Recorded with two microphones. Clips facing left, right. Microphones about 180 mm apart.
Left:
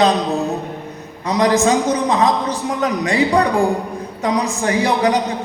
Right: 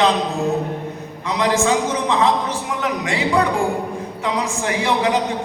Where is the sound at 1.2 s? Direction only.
40° left (ahead or behind).